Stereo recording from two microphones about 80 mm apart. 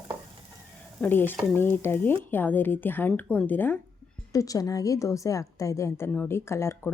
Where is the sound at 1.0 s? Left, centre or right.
Left.